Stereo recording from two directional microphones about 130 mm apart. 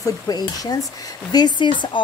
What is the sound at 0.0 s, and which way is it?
Speech, 30° left (ahead or behind).